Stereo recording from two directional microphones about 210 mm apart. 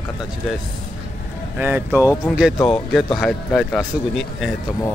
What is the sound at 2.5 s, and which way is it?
Speech, 25° left (ahead or behind).